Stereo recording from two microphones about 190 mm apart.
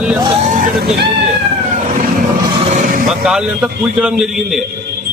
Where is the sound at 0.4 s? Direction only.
45° right (ahead or behind).